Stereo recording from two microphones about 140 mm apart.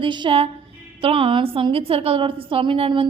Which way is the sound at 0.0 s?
35° right (ahead or behind).